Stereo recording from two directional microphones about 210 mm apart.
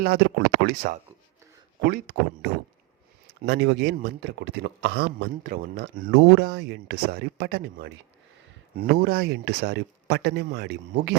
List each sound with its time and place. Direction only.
0.0 s speech: 50° right (ahead or behind)